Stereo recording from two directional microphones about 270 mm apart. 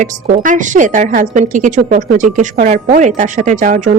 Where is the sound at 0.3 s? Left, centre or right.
Right.